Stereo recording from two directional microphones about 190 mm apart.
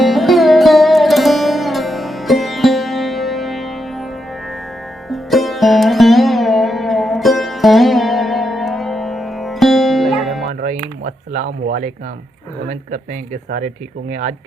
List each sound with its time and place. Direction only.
0.0 s music: centre (ahead or behind)
5.0 s sitar: centre (ahead or behind)
10.6 s a sound: 40° right (ahead or behind)
12.6 s speech: 40° right (ahead or behind)